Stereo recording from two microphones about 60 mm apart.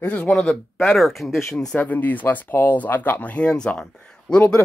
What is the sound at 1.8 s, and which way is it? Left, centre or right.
Speech, left.